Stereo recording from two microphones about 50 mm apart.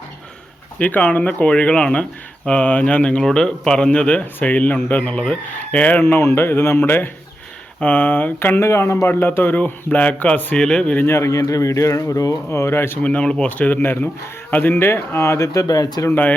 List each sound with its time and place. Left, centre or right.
0.8 s speech: left
3.2 s speech: centre
6.0 s speech: left
7.8 s speech: left
8.4 s speech: left
8.6 s speech: left
10.6 s speech: centre
11.0 s speech: left
13.0 s speech: left
15.2 s speech: left